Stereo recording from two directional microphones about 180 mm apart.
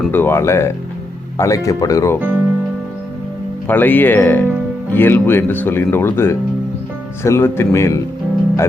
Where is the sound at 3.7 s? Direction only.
10° left (ahead or behind).